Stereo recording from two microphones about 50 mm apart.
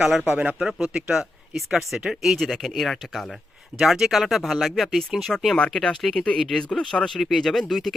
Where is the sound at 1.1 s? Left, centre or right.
Centre.